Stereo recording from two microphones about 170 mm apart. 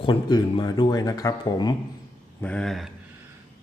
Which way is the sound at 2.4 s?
5° left (ahead or behind).